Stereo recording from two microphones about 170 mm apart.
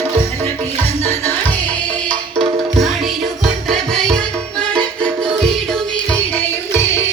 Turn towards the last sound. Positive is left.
turn(degrees=15)  # may be behind; listen again after turning